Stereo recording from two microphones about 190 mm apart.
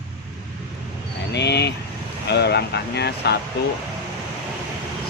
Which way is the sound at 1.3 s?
65° left (ahead or behind).